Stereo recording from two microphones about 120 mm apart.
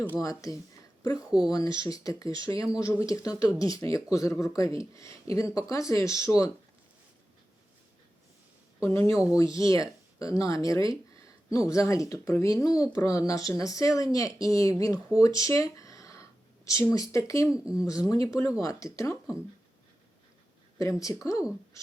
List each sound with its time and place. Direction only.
0.2 s speech: 25° left (ahead or behind)
8.8 s speech: 20° left (ahead or behind)
20.7 s speech: 25° left (ahead or behind)